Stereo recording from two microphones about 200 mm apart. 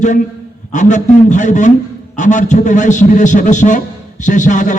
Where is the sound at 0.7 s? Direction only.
35° left (ahead or behind).